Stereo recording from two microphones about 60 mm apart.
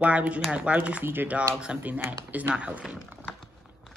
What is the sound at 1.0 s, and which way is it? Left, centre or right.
Speech, right.